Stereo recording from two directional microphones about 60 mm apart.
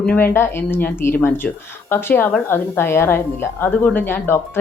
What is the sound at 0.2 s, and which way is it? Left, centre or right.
Speech, left.